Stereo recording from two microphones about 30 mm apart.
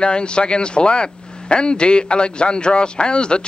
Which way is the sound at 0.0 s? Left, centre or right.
Left.